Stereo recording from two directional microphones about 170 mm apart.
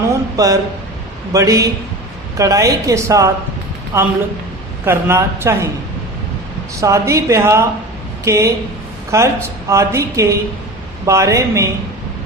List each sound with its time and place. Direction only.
0.1 s a sound: 20° right (ahead or behind)
1.3 s a woman's voice: 20° right (ahead or behind)
6.7 s a woman's voice: 15° right (ahead or behind)